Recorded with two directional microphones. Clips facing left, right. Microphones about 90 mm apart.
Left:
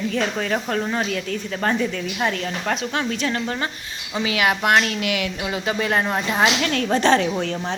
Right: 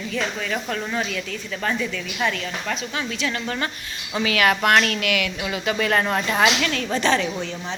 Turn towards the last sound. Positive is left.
turn(degrees=55)  # may be behind; listen again after turning